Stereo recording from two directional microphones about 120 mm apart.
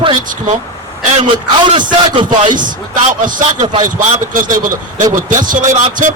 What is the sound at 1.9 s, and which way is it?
Speech, 40° right (ahead or behind).